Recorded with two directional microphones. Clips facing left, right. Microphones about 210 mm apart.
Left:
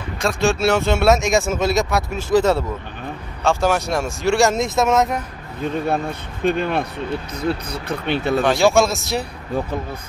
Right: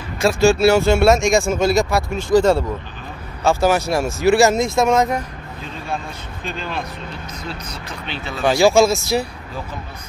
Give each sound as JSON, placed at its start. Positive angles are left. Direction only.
{"t": 0.2, "sound": "speech", "side_deg": 0}
{"t": 6.4, "sound": "speech", "side_deg": 60}
{"t": 8.4, "sound": "speech", "side_deg": 0}